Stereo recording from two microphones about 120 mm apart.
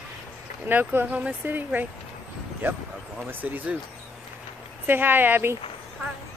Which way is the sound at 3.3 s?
15° right (ahead or behind).